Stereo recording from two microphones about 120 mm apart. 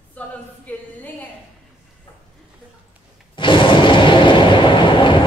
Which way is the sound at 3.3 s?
45° left (ahead or behind).